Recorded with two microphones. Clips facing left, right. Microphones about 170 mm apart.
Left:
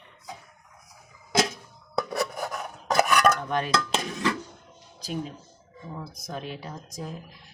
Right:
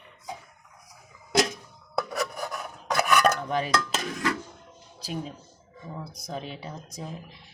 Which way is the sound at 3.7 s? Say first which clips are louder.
Left 1 dB; 25° left (ahead or behind).